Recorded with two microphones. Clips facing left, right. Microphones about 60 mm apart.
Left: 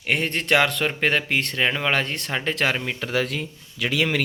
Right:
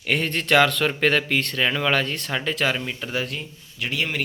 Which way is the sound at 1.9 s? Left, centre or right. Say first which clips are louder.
Right 1 dB; left.